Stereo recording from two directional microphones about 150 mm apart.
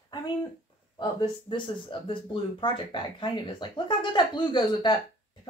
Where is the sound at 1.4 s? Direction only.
35° left (ahead or behind).